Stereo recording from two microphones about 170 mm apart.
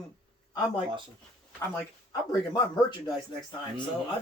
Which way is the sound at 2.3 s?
25° left (ahead or behind).